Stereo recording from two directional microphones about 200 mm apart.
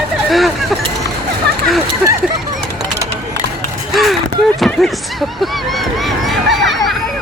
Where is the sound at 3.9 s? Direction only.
Centre (ahead or behind).